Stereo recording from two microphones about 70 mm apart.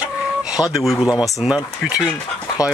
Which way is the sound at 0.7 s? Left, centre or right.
Centre.